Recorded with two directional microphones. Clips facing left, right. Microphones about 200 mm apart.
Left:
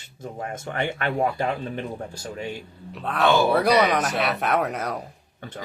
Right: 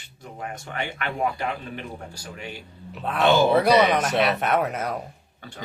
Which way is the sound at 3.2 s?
20° right (ahead or behind).